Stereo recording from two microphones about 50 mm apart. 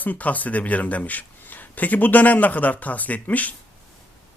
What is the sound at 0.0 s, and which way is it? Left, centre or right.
Speech, left.